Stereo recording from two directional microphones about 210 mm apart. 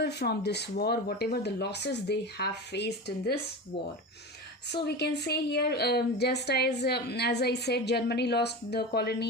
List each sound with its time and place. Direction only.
0.0 s a woman's voice: 50° left (ahead or behind)
4.7 s a woman's voice: 50° left (ahead or behind)